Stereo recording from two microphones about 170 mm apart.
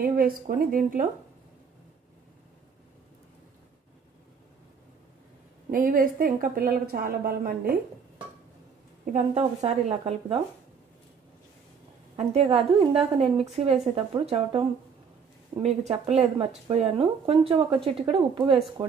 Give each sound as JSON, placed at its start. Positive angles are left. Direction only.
{"t": 0.0, "sound": "a woman's voice", "side_deg": -60}
{"t": 5.7, "sound": "a woman's voice", "side_deg": -55}
{"t": 9.3, "sound": "a woman's voice", "side_deg": -40}
{"t": 12.2, "sound": "a woman's voice", "side_deg": -35}
{"t": 15.6, "sound": "a woman's voice", "side_deg": -35}